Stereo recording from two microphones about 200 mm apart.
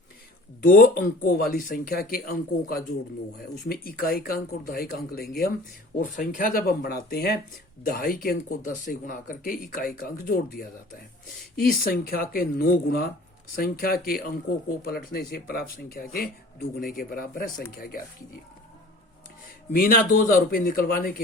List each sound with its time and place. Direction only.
0.7 s speech: 45° left (ahead or behind)
11.7 s speech: 45° left (ahead or behind)
19.7 s speech: 45° left (ahead or behind)